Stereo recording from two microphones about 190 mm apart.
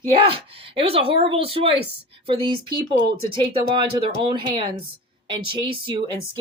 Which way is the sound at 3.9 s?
25° right (ahead or behind).